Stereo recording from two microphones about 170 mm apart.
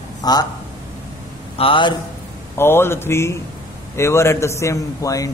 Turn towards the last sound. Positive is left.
turn(degrees=20)  # may be behind; listen again after turning